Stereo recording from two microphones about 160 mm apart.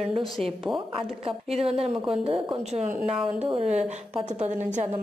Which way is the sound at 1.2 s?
40° right (ahead or behind).